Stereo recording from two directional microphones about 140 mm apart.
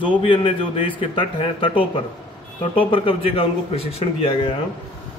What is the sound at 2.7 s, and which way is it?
Speech, 40° left (ahead or behind).